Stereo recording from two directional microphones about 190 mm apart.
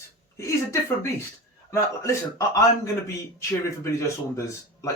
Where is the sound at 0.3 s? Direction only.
15° left (ahead or behind).